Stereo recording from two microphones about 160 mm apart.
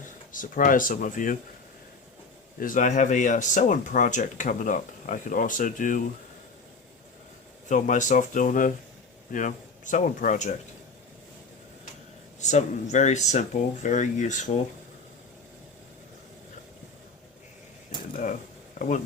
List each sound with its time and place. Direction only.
0.3 s speech: 55° left (ahead or behind)
2.6 s speech: 55° left (ahead or behind)
7.7 s speech: 50° left (ahead or behind)
12.4 s speech: 45° left (ahead or behind)